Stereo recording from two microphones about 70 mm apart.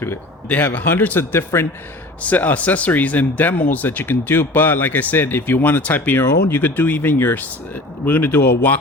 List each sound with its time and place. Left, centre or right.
0.0 s speech: left
2.2 s speech: left